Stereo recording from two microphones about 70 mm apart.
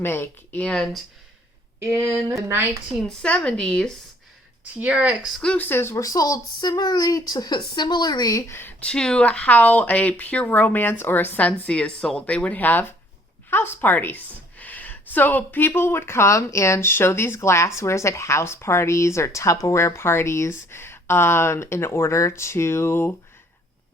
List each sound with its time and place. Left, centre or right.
0.0 s a woman's voice: left
0.6 s speech: centre
3.2 s speech: centre
4.8 s speech: centre
5.5 s a woman's voice: left
6.0 s speech: left
8.3 s speech: left
8.8 s a woman's voice: centre; by 23.1 s left